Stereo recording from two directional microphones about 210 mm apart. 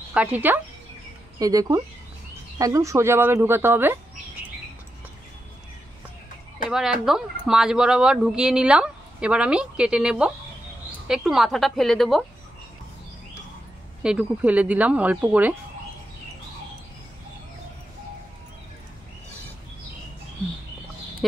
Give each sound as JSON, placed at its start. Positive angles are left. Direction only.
{"t": 0.1, "sound": "speech", "side_deg": -5}
{"t": 6.7, "sound": "speech", "side_deg": 0}
{"t": 14.0, "sound": "speech", "side_deg": -5}